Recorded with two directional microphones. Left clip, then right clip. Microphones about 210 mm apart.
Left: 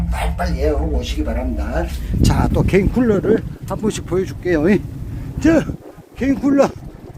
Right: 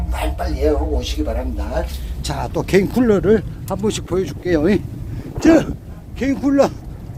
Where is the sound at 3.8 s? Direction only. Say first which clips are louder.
Even; 15° right (ahead or behind).